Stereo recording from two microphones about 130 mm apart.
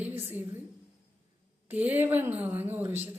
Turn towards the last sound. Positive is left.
turn(degrees=-15)  # may be behind; listen again after turning